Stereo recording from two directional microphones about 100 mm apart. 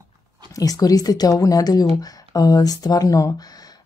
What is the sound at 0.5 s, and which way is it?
Speech, 35° left (ahead or behind).